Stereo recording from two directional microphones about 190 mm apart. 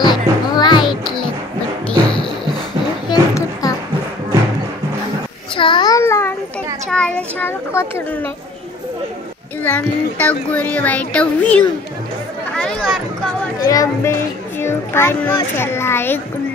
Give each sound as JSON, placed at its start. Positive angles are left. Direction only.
{"t": 0.0, "sound": "music", "side_deg": 25}
{"t": 0.8, "sound": "music", "side_deg": 0}
{"t": 3.1, "sound": "music", "side_deg": 20}
{"t": 5.6, "sound": "babbling", "side_deg": 25}
{"t": 6.9, "sound": "a child's voice", "side_deg": 5}
{"t": 9.6, "sound": "a child's voice", "side_deg": 10}
{"t": 12.5, "sound": "chatter", "side_deg": 5}
{"t": 13.7, "sound": "a child's voice", "side_deg": 15}